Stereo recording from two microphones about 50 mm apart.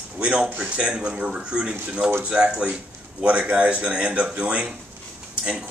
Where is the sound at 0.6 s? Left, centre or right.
Centre.